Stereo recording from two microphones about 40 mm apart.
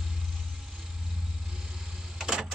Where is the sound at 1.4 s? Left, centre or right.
Centre.